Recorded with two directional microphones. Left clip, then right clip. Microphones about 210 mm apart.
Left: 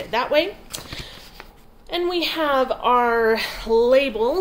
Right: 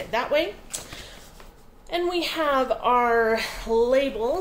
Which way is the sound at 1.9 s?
25° left (ahead or behind).